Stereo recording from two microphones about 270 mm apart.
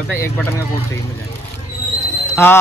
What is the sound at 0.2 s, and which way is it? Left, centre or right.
Speech, centre.